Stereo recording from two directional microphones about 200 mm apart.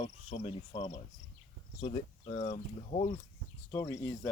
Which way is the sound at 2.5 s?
35° left (ahead or behind).